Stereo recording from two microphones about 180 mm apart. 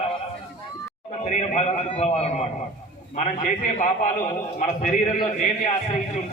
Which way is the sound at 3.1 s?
45° left (ahead or behind).